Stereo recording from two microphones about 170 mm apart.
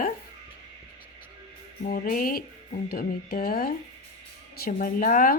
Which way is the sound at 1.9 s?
60° left (ahead or behind).